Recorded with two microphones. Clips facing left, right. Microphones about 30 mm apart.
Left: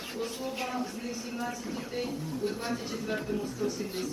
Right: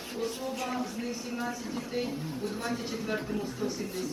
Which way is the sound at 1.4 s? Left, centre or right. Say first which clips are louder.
Right 1 dB; centre.